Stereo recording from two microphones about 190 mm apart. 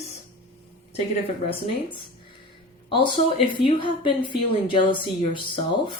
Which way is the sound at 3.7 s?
25° left (ahead or behind).